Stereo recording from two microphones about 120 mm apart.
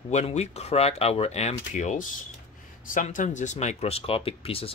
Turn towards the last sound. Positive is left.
turn(degrees=50)  # may be behind; listen again after turning